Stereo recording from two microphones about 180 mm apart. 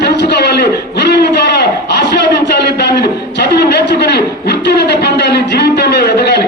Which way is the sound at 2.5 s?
70° left (ahead or behind).